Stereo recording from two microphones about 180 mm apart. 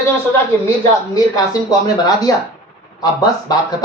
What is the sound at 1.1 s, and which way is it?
Speech, 20° left (ahead or behind).